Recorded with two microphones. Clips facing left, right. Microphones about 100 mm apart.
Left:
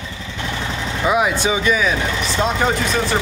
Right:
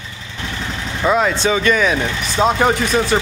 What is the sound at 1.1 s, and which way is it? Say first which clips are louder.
Speech: right 2 dB; 15° left (ahead or behind).